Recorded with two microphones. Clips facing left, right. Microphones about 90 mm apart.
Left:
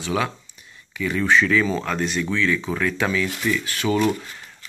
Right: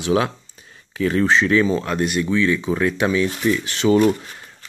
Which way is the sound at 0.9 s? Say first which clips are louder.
Right 2 dB; 35° right (ahead or behind).